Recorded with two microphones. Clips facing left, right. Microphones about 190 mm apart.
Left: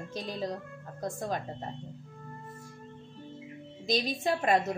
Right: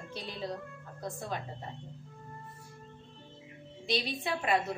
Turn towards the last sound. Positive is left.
turn(degrees=40)  # may be behind; listen again after turning